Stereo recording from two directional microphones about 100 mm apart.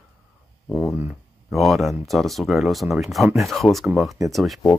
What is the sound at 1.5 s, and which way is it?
Speech, centre (ahead or behind).